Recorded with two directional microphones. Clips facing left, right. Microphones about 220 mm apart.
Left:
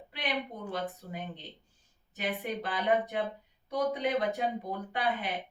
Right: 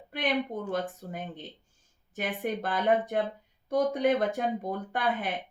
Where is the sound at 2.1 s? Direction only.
50° right (ahead or behind).